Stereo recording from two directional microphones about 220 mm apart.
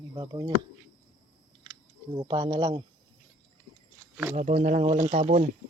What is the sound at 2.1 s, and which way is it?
Speech, 20° right (ahead or behind).